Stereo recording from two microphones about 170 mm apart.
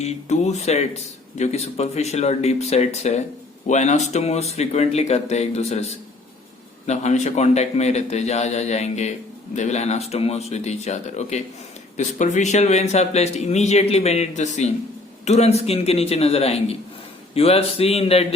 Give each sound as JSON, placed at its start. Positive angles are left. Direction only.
{"t": 0.0, "sound": "speech", "side_deg": 40}